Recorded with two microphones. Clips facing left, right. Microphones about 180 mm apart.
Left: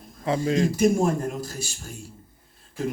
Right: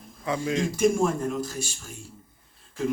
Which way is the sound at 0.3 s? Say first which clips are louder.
Left 4 dB; 40° left (ahead or behind).